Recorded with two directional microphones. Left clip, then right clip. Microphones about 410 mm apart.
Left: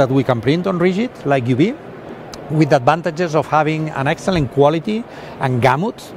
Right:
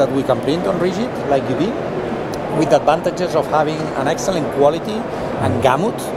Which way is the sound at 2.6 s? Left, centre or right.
Left.